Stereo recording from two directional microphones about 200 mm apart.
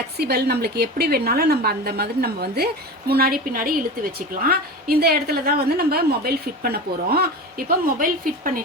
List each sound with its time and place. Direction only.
0.2 s a woman's voice: 50° right (ahead or behind)